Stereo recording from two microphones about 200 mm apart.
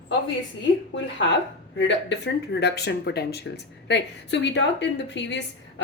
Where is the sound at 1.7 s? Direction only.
60° left (ahead or behind).